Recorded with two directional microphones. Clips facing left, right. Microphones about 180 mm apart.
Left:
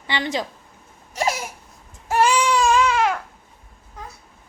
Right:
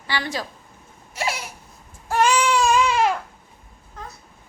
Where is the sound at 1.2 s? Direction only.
40° left (ahead or behind).